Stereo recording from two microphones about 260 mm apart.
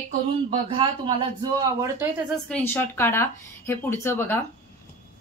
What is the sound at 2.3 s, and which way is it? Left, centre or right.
Speech, centre.